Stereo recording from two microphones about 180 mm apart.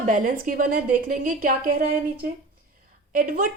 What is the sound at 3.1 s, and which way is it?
Speech, 50° right (ahead or behind).